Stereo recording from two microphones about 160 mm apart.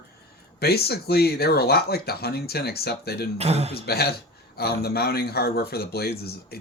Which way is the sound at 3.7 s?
75° left (ahead or behind).